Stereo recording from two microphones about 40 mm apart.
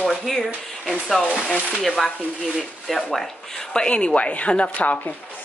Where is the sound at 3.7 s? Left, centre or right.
Left.